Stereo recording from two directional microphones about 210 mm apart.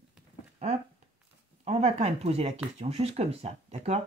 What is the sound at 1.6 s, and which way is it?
Speech, 30° right (ahead or behind).